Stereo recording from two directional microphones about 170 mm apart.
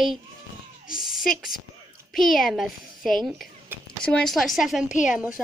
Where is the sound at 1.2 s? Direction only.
Centre (ahead or behind).